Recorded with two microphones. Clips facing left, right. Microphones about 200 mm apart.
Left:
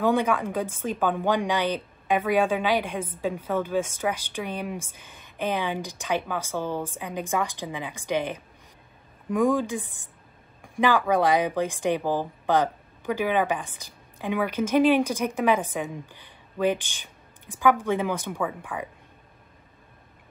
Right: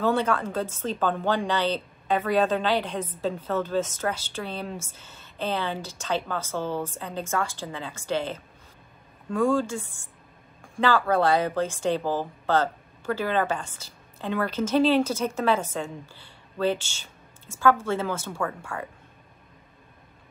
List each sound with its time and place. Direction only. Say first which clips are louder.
0.0 s a woman's voice: left 1 dB; 15° left (ahead or behind)